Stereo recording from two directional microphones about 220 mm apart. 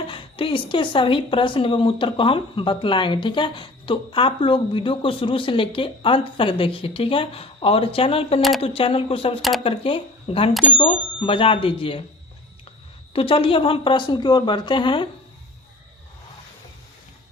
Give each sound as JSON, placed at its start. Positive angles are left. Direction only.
{"t": 0.1, "sound": "speech", "side_deg": 25}
{"t": 8.4, "sound": "speech", "side_deg": 0}
{"t": 8.6, "sound": "speech", "side_deg": 25}
{"t": 13.1, "sound": "speech", "side_deg": 25}